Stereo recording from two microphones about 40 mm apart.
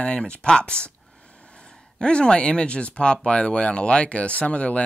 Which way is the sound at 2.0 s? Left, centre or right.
Left.